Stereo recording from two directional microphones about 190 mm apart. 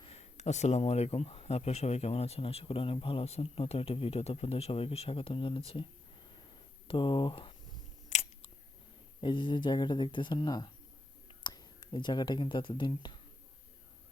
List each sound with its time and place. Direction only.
0.0 s speech: 35° left (ahead or behind)
8.1 s chewing: 35° left (ahead or behind)
9.2 s speech: 25° left (ahead or behind)